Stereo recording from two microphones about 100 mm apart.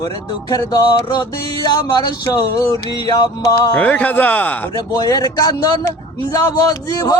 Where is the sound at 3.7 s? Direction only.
15° left (ahead or behind).